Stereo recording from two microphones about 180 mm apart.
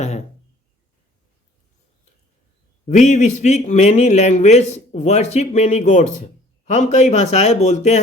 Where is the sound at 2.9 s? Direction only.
40° left (ahead or behind).